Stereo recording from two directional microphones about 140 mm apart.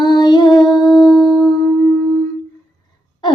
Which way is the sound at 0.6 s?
30° left (ahead or behind).